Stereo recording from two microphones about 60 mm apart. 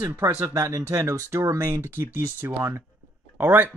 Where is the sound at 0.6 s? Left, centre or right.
Right.